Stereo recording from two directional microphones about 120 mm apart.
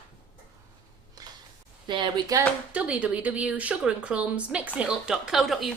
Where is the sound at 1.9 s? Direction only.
40° right (ahead or behind).